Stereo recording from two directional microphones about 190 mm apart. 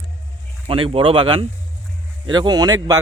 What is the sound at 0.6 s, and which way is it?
Speech, 30° right (ahead or behind).